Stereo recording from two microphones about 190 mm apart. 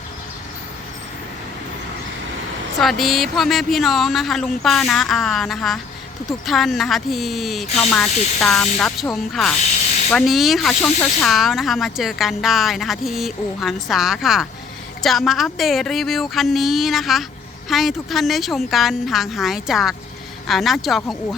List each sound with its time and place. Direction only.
2.8 s speech: centre (ahead or behind)